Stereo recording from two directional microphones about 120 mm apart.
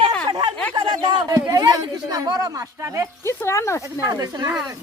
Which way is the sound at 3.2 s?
25° left (ahead or behind).